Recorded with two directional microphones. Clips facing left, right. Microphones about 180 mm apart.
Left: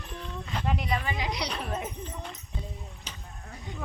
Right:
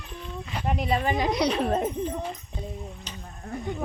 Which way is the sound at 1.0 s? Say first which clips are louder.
Right 9 dB; 45° right (ahead or behind).